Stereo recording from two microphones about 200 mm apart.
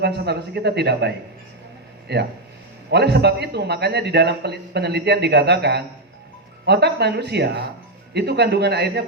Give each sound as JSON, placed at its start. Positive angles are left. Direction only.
{"t": 0.0, "sound": "a man's voice", "side_deg": -55}